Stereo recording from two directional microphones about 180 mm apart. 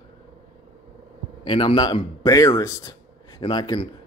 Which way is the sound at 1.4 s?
25° left (ahead or behind).